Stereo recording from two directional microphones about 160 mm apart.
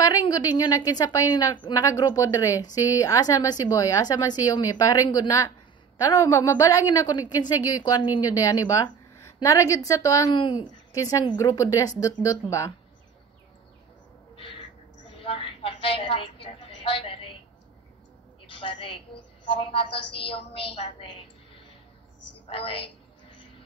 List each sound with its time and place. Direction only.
0.0 s a woman's voice: 25° left (ahead or behind)
14.3 s owl: 35° left (ahead or behind)
15.1 s a sound: 35° left (ahead or behind)
18.6 s a woman's voice: 30° left (ahead or behind)
22.5 s a woman's voice: 35° left (ahead or behind)